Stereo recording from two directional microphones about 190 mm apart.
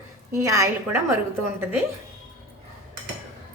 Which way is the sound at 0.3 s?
15° right (ahead or behind).